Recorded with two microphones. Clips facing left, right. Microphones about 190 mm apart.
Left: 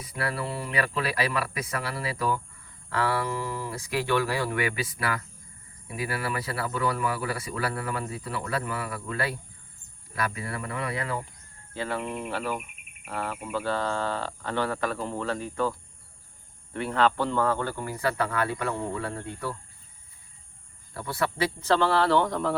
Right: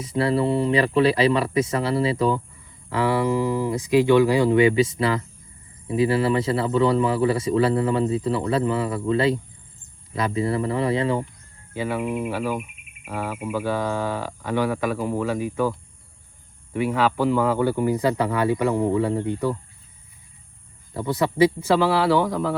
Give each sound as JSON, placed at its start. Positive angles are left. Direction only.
{"t": 0.0, "sound": "speech", "side_deg": -25}
{"t": 11.7, "sound": "speech", "side_deg": -10}
{"t": 16.7, "sound": "speech", "side_deg": -10}
{"t": 20.9, "sound": "speech", "side_deg": -20}